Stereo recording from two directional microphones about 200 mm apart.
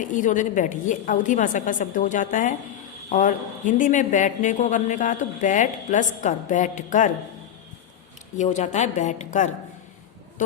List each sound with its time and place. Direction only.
0.0 s speech: 40° left (ahead or behind)
8.4 s speech: 40° left (ahead or behind)